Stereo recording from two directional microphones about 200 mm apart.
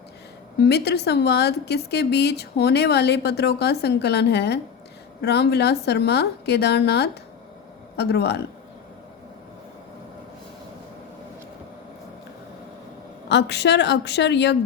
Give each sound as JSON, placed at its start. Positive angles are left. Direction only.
{"t": 0.6, "sound": "a woman's voice", "side_deg": 55}
{"t": 13.2, "sound": "a woman's voice", "side_deg": 60}